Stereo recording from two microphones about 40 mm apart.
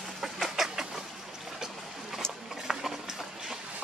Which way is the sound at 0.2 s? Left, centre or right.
Centre.